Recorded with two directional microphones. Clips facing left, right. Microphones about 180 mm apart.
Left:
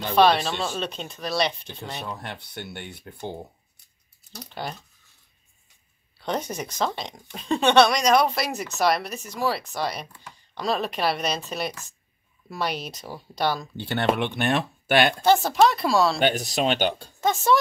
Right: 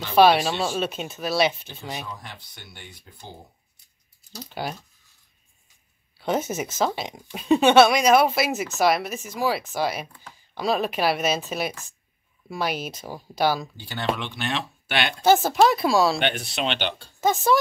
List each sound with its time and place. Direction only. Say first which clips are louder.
0.1 s speech: right 2 dB; 5° right (ahead or behind)
2.0 s speech: left 4 dB; 65° left (ahead or behind)
4.6 s speech: right 2 dB; 5° right (ahead or behind)
6.1 s speech: right 3 dB; 5° right (ahead or behind)
13.7 s speech: left 4 dB; 60° left (ahead or behind)
15.2 s speech: right 5 dB; centre (ahead or behind)
16.2 s speech: left 3 dB; 40° left (ahead or behind)
17.2 s speech: right 1 dB; centre (ahead or behind)